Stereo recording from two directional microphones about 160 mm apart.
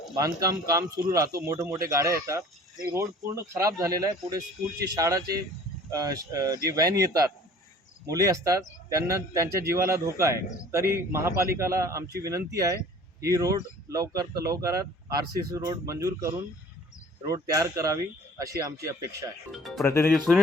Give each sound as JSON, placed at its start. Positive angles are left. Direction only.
{"t": 0.2, "sound": "a man's voice", "side_deg": -20}
{"t": 13.2, "sound": "speech", "side_deg": -20}
{"t": 19.5, "sound": "speech", "side_deg": 0}
{"t": 19.8, "sound": "speech", "side_deg": 15}
{"t": 20.1, "sound": "speech", "side_deg": 0}